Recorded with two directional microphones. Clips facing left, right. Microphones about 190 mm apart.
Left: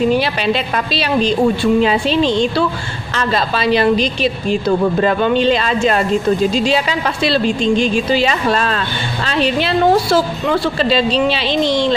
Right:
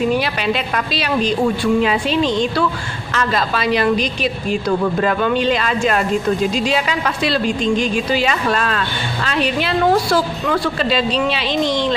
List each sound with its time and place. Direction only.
0.1 s a woman's voice: 30° left (ahead or behind)